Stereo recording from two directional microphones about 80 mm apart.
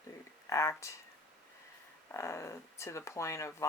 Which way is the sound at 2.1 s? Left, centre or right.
Left.